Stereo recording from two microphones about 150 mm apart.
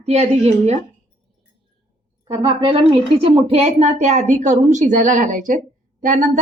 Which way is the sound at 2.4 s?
35° right (ahead or behind).